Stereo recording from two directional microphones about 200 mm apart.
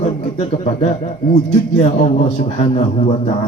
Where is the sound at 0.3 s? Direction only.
35° left (ahead or behind).